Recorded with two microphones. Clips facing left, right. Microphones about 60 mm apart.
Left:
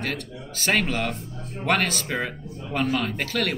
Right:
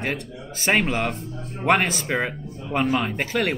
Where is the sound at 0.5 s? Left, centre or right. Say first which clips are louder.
Right 2 dB; right.